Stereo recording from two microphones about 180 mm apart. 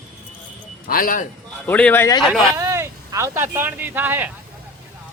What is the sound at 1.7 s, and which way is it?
Speech, 10° left (ahead or behind).